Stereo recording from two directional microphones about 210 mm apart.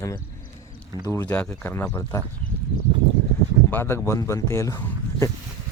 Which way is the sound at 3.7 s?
10° left (ahead or behind).